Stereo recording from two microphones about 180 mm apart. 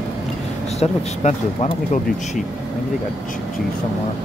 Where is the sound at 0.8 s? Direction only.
35° left (ahead or behind).